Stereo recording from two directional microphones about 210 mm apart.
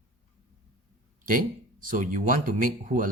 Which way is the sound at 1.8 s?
40° right (ahead or behind).